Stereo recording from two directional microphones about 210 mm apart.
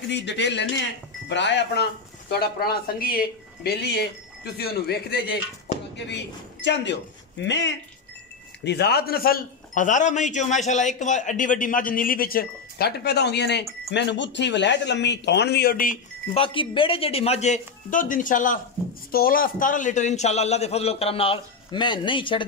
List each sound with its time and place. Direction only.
0.1 s a man's voice: 55° left (ahead or behind)
16.3 s a man's voice: 25° left (ahead or behind)